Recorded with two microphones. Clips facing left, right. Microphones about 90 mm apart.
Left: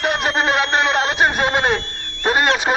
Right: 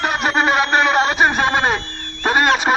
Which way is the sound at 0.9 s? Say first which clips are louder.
Right 2 dB; 15° right (ahead or behind).